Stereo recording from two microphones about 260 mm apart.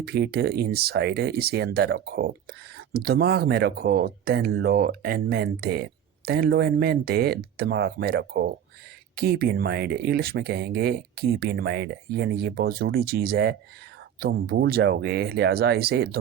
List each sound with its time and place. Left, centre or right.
0.0 s speech: right